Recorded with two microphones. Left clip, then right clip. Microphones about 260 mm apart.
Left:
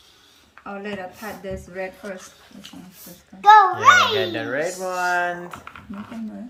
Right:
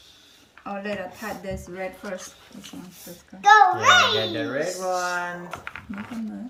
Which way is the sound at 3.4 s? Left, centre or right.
Left.